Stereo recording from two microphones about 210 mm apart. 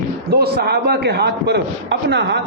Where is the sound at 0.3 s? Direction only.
50° right (ahead or behind).